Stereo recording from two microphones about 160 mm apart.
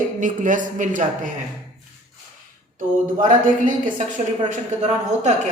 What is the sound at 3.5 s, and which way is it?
Speech, 55° right (ahead or behind).